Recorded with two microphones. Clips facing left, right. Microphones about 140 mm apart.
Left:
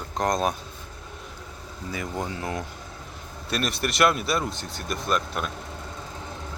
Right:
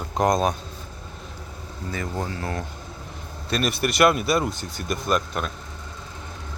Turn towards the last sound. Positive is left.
turn(degrees=0)  # may be behind; listen again after turning